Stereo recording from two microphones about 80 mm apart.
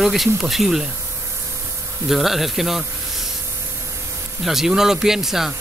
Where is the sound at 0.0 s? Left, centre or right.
Centre.